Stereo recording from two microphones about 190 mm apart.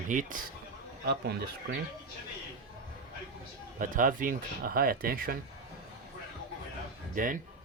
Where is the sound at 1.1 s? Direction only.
60° right (ahead or behind).